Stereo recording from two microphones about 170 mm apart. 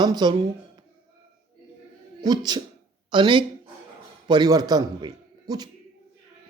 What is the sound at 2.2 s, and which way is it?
A man's voice, 25° right (ahead or behind).